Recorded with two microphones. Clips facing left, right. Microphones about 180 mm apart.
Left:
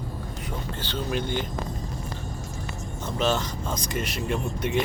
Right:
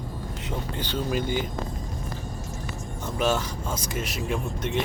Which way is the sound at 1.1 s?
5° right (ahead or behind).